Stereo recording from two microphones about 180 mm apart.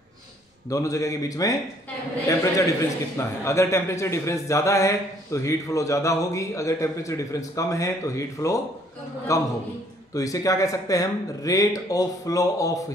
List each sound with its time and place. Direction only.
0.7 s a man's voice: 20° left (ahead or behind)